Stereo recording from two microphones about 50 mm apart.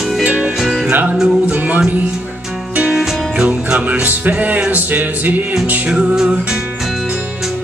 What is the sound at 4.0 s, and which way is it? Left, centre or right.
Music, right.